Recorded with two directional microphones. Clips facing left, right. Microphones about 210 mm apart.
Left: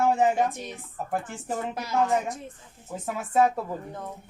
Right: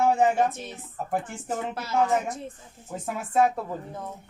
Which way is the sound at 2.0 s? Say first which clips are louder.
Right 1 dB; centre (ahead or behind).